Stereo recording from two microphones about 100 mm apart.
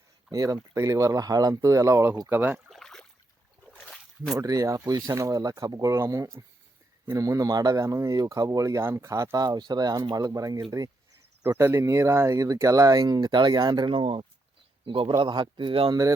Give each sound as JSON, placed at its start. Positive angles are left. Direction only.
{"t": 0.3, "sound": "speech", "side_deg": -35}
{"t": 2.6, "sound": "rowboat", "side_deg": 5}
{"t": 3.8, "sound": "a sound", "side_deg": 5}
{"t": 4.4, "sound": "speech", "side_deg": -35}
{"t": 11.4, "sound": "a man's voice", "side_deg": -25}
{"t": 15.2, "sound": "a man's voice", "side_deg": -50}
{"t": 15.9, "sound": "speech", "side_deg": -35}